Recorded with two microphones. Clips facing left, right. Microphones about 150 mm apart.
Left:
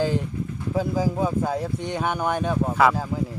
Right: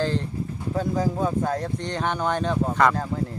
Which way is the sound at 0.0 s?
10° left (ahead or behind).